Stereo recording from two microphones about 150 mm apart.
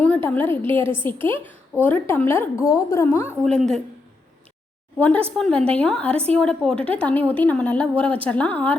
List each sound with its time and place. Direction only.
0.0 s a woman's voice: 10° left (ahead or behind)
3.4 s speech: 5° left (ahead or behind)
4.9 s a woman's voice: 10° left (ahead or behind)